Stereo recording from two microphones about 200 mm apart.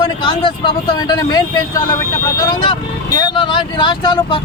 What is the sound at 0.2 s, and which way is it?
Speech, 25° left (ahead or behind).